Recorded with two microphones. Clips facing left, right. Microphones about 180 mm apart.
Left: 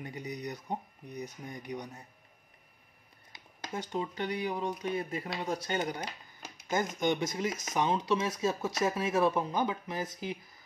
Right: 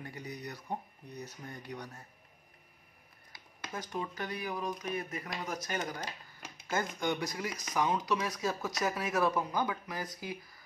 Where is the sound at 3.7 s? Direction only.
25° left (ahead or behind).